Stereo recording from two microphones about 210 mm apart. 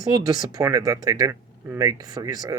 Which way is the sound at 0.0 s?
20° right (ahead or behind).